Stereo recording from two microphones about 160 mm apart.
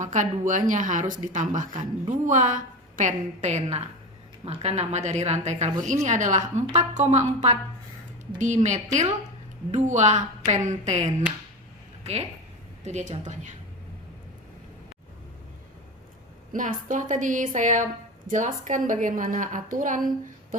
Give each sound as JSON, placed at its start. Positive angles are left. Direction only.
{"t": 0.0, "sound": "speech", "side_deg": -50}
{"t": 16.5, "sound": "a woman's voice", "side_deg": -55}